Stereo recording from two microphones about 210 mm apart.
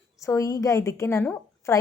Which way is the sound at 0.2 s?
15° left (ahead or behind).